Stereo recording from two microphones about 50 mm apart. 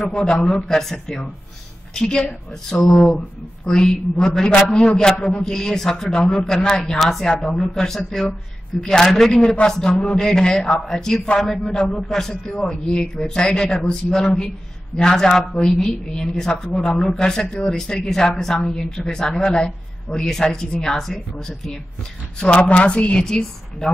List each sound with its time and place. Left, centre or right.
0.1 s a woman's voice: centre
22.4 s a woman's voice: left